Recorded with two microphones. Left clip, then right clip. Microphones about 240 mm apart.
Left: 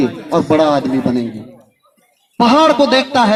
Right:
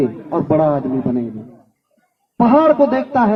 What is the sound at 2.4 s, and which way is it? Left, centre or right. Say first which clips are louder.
Speech: left 1 dB; left.